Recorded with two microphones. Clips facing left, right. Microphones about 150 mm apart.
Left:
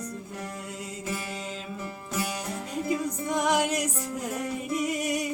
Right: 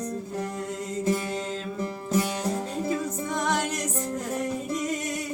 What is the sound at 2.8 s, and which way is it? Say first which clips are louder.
Music: left 3 dB; 10° left (ahead or behind).